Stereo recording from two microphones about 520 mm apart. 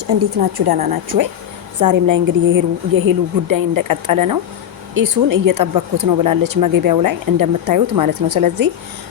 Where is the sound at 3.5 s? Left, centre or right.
Right.